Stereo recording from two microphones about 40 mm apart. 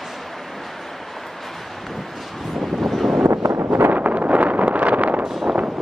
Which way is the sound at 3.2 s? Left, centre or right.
Right.